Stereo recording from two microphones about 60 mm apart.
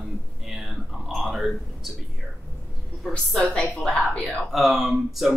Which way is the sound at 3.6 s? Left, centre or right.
Centre.